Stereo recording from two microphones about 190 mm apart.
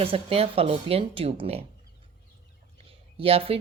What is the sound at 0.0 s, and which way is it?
Speech, 30° right (ahead or behind).